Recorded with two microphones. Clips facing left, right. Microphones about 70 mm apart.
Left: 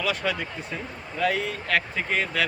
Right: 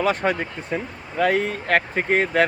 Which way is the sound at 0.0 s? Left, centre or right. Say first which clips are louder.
Right 6 dB; right.